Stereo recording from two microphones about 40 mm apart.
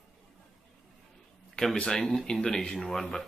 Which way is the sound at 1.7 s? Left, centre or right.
Left.